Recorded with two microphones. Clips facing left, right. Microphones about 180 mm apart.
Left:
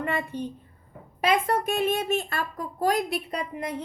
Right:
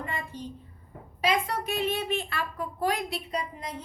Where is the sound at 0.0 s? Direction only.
65° left (ahead or behind).